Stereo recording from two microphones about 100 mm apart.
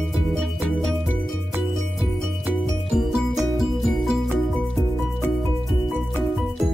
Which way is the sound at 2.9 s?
Centre (ahead or behind).